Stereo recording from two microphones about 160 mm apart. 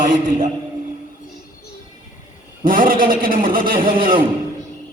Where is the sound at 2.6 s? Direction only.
60° right (ahead or behind).